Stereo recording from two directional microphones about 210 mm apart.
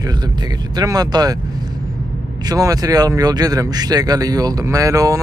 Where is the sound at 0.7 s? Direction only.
20° right (ahead or behind).